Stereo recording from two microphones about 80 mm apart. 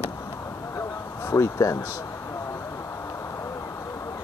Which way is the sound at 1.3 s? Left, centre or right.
Left.